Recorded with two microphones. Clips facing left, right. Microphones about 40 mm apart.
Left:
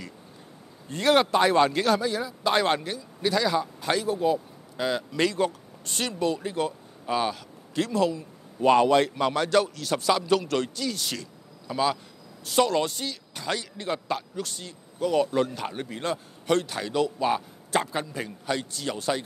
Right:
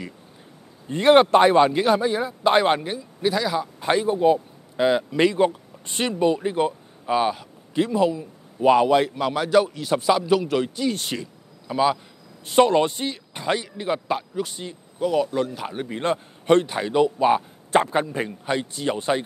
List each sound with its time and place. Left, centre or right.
0.8 s speech: right; by 3.7 s centre
3.8 s a man's voice: right
10.8 s speech: right
11.1 s a sound: centre
12.4 s speech: right
15.0 s a man's voice: centre
16.0 s speech: right